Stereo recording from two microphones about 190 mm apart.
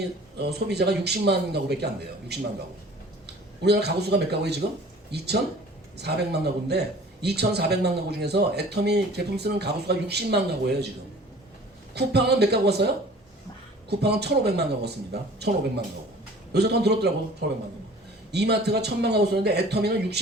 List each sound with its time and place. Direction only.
0.3 s a man's voice: 60° right (ahead or behind)
3.6 s a man's voice: 60° right (ahead or behind)
11.9 s a man's voice: 60° right (ahead or behind)
14.0 s a man's voice: 60° right (ahead or behind)
16.5 s a man's voice: 60° right (ahead or behind)
18.3 s a man's voice: 60° right (ahead or behind)